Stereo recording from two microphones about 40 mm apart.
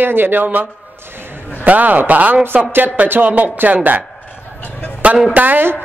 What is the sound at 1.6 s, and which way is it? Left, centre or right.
A woman's voice, right.